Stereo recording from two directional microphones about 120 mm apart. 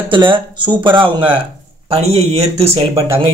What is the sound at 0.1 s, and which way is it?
Speech, 45° right (ahead or behind).